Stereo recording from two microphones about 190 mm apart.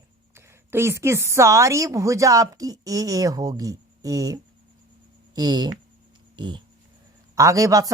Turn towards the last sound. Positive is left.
turn(degrees=-20)  # may be behind; listen again after turning